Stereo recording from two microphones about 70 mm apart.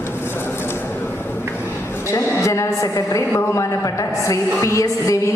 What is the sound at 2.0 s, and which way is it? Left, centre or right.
A woman's voice, left.